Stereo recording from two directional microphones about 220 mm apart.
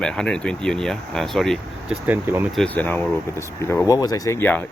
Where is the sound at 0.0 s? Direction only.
5° left (ahead or behind).